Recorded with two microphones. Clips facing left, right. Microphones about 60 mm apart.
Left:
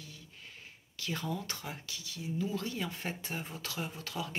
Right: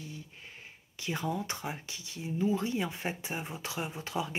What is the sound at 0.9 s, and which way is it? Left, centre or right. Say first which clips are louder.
Speech: right 3 dB; right.